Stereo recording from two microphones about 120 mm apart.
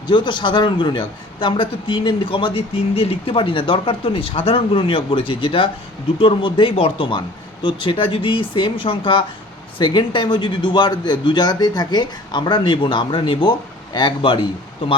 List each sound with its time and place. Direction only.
0.1 s a man's voice: 40° left (ahead or behind)